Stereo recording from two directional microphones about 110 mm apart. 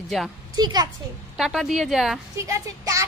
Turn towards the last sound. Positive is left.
turn(degrees=-30)  # may be behind; listen again after turning